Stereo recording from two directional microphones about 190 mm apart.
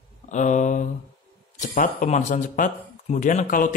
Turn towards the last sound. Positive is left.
turn(degrees=45)  # may be behind; listen again after turning